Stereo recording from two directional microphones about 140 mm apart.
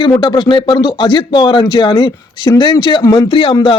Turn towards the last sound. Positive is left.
turn(degrees=45)  # may be behind; listen again after turning